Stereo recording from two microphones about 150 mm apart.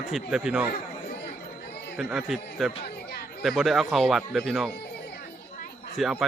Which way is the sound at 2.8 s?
90° left.